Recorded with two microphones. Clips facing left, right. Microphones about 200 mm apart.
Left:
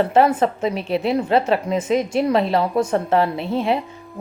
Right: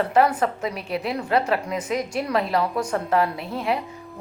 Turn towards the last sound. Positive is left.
turn(degrees=25)  # may be behind; listen again after turning